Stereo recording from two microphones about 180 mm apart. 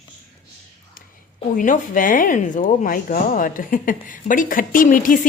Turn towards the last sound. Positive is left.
turn(degrees=50)  # may be behind; listen again after turning